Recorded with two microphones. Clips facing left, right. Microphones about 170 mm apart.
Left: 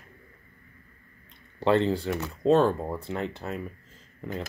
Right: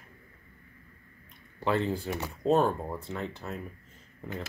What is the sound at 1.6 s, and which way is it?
Speech, 75° left (ahead or behind).